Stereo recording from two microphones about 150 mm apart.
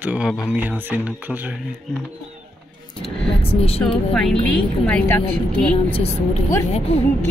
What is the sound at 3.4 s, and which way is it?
Speech, 40° left (ahead or behind).